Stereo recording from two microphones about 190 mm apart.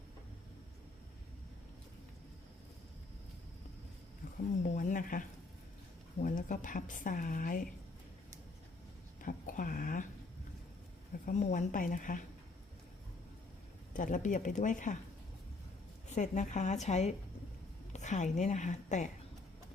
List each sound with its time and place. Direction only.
4.6 s speech: 40° left (ahead or behind)
6.2 s speech: 45° left (ahead or behind)
9.2 s speech: 45° left (ahead or behind)
11.3 s speech: 40° left (ahead or behind)
13.9 s a woman's voice: 45° left (ahead or behind)
16.0 s a woman's voice: 40° left (ahead or behind)